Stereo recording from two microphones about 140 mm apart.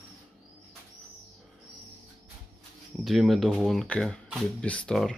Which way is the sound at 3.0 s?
Centre (ahead or behind).